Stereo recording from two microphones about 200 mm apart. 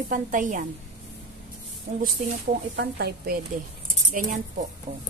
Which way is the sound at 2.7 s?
55° right (ahead or behind).